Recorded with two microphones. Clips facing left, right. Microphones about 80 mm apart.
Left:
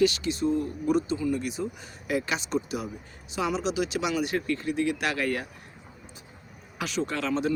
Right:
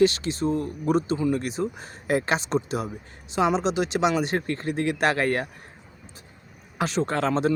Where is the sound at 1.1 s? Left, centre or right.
Right.